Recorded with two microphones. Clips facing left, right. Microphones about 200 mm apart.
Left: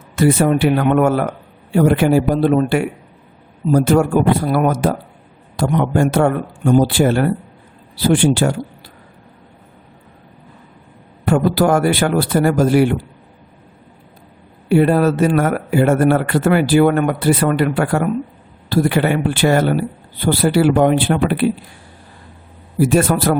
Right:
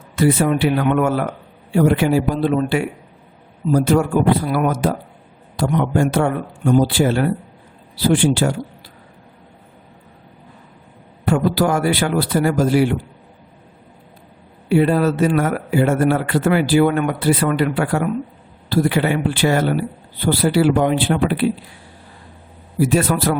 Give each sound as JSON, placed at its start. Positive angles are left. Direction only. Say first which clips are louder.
{"t": 0.2, "sound": "speech", "louder": "left 2 dB", "side_deg": 45}
{"t": 11.3, "sound": "speech", "louder": "left 4 dB", "side_deg": 50}
{"t": 14.7, "sound": "speech", "louder": "left 2 dB", "side_deg": 50}
{"t": 22.9, "sound": "speech", "louder": "left 3 dB", "side_deg": 50}